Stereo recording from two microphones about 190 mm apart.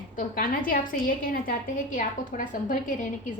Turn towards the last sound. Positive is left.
turn(degrees=45)  # may be behind; listen again after turning